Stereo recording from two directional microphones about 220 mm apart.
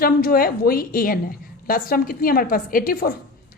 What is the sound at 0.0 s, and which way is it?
A woman's voice, 40° left (ahead or behind).